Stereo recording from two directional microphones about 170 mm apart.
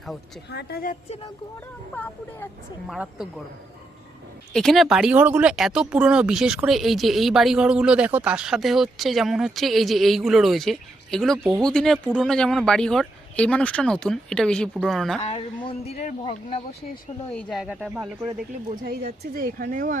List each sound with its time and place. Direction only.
0.5 s a woman's voice: 65° left (ahead or behind)
2.8 s speech: 5° right (ahead or behind)
4.5 s speech: centre (ahead or behind)
15.3 s speech: 35° left (ahead or behind)
17.3 s speech: centre (ahead or behind)
18.7 s speech: 65° right (ahead or behind)